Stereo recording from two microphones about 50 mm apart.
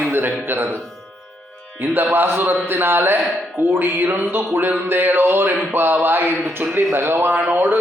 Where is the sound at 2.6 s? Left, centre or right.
Right.